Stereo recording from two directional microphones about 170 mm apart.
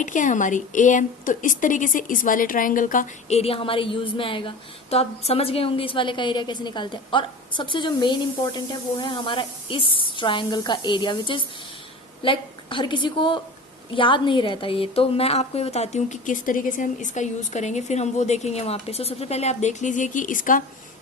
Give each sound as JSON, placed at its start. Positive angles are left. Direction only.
{"t": 0.0, "sound": "a woman's voice", "side_deg": 50}